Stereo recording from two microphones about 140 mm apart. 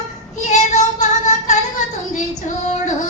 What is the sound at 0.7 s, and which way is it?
Music, 55° left (ahead or behind).